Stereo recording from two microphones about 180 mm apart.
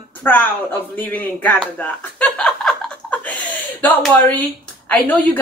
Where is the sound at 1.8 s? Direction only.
5° left (ahead or behind).